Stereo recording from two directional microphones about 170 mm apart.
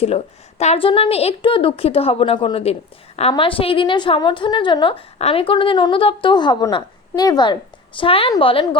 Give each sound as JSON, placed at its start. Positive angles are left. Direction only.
{"t": 0.6, "sound": "a woman's voice", "side_deg": 35}